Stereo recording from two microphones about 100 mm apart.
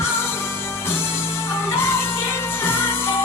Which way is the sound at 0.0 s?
25° left (ahead or behind).